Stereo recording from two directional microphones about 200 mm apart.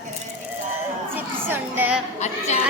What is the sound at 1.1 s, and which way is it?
Music, 10° right (ahead or behind).